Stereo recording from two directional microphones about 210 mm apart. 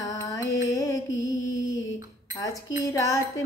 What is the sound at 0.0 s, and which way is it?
Music, 15° left (ahead or behind).